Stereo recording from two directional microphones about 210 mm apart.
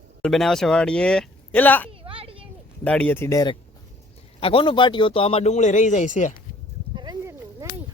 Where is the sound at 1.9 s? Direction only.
25° right (ahead or behind).